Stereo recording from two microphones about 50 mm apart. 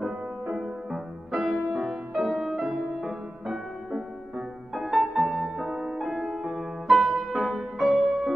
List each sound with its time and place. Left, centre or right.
0.0 s music: centre